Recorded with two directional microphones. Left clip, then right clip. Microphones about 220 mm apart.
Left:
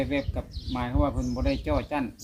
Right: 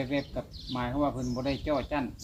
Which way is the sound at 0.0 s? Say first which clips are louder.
Left 3 dB; 50° left (ahead or behind).